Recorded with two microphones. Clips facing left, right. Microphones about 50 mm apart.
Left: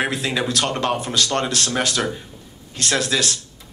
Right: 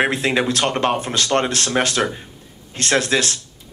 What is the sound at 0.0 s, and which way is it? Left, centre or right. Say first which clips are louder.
Speech: right 4 dB; right.